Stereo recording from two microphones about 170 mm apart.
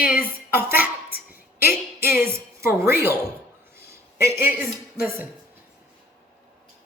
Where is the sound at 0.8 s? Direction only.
60° left (ahead or behind).